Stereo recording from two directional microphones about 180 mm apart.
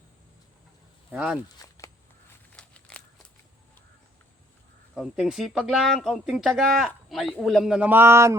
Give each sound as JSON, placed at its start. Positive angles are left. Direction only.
{"t": 1.1, "sound": "speech", "side_deg": -5}
{"t": 1.5, "sound": "speech", "side_deg": 20}
{"t": 2.5, "sound": "walk", "side_deg": 5}
{"t": 4.9, "sound": "speech", "side_deg": 0}